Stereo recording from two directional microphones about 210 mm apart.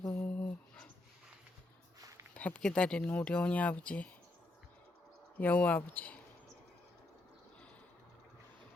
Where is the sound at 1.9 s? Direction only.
15° right (ahead or behind).